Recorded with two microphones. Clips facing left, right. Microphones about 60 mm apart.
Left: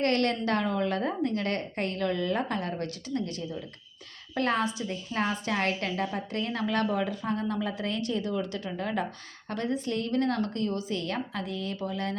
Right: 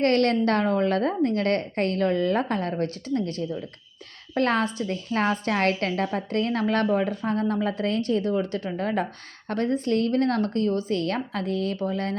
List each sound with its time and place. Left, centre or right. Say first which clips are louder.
0.0 s a woman's voice: right 6 dB; right